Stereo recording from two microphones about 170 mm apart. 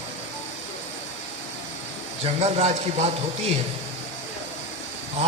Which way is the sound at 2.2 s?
40° right (ahead or behind).